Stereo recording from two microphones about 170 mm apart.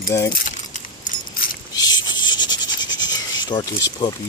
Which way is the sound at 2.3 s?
25° left (ahead or behind).